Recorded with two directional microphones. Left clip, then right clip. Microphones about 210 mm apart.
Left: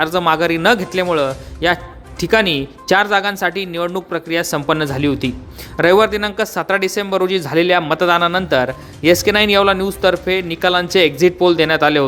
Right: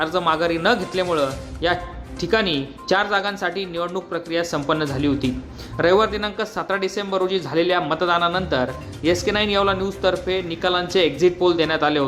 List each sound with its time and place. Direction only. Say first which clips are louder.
0.0 s speech: left 5 dB; 45° left (ahead or behind)